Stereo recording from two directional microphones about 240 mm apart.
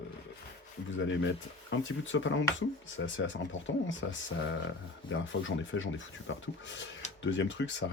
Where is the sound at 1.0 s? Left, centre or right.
Left.